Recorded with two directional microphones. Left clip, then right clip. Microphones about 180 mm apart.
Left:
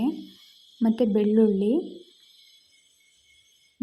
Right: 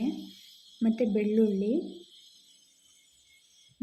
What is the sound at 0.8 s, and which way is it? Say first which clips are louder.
Speech: left 5 dB; 20° left (ahead or behind).